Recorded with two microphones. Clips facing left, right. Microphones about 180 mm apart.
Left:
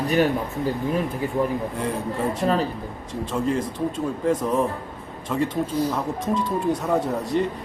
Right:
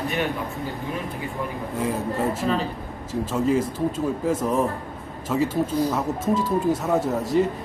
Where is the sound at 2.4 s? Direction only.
45° left (ahead or behind).